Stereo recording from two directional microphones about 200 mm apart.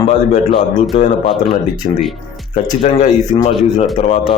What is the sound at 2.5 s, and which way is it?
Speech, 35° left (ahead or behind).